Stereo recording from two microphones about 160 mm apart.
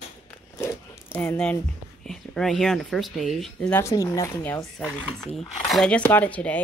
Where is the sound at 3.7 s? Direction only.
20° left (ahead or behind).